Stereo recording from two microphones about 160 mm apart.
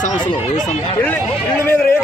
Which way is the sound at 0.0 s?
50° left (ahead or behind).